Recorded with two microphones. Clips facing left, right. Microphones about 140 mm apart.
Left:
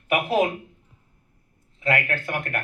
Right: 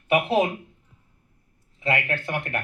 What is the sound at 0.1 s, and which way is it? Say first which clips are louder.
Speech: right 1 dB; 25° right (ahead or behind).